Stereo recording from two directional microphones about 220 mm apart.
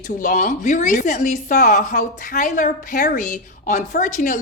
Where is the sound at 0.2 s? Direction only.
35° left (ahead or behind).